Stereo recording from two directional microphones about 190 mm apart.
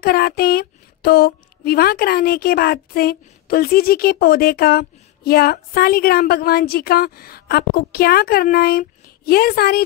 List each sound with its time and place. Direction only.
0.0 s speech: 55° left (ahead or behind)